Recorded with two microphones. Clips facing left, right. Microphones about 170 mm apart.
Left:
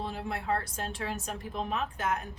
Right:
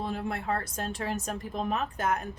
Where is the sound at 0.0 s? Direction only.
50° right (ahead or behind).